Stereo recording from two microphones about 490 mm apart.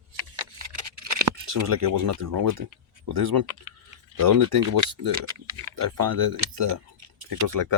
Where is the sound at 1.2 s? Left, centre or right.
Right.